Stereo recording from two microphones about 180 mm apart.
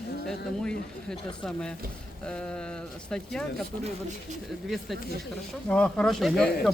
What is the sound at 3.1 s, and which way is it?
Speech, 5° left (ahead or behind).